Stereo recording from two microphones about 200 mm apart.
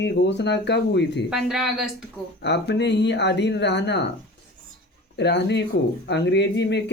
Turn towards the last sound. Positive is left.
turn(degrees=60)  # may be behind; listen again after turning